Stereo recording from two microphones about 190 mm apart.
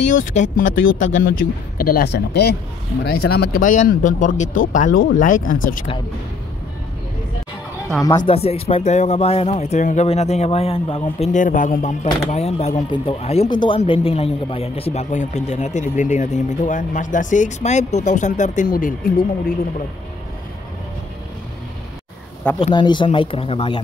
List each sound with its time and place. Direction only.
0.0 s speech: 40° left (ahead or behind)
8.3 s speech: 30° left (ahead or behind); by 19.5 s 50° left (ahead or behind)
22.6 s speech: 25° left (ahead or behind)